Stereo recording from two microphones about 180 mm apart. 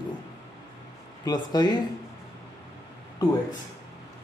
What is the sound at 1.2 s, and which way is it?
Speech, 20° left (ahead or behind).